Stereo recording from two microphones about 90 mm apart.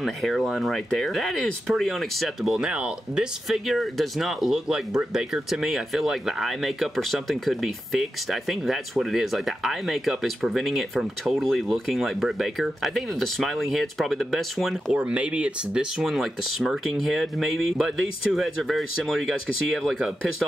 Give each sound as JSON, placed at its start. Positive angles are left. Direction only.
{"t": 0.0, "sound": "speech", "side_deg": 0}
{"t": 14.9, "sound": "speech", "side_deg": -15}